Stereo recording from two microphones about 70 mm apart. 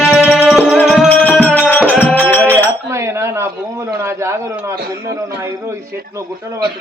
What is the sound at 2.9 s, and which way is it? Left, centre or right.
Cutlery, right.